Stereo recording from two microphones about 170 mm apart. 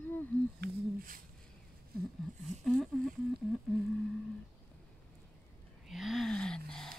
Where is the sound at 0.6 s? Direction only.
55° right (ahead or behind).